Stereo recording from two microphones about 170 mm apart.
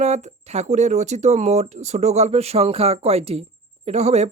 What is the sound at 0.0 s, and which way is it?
A man's voice, 40° right (ahead or behind).